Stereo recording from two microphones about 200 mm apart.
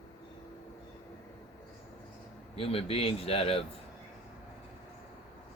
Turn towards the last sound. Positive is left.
turn(degrees=30)  # may be behind; listen again after turning